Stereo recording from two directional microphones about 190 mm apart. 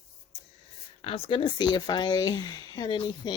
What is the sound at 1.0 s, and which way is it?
Speech, 30° left (ahead or behind).